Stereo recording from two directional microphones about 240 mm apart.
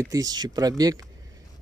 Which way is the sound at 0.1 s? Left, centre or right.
Centre.